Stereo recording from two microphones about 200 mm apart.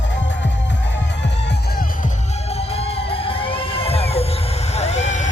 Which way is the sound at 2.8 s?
30° left (ahead or behind).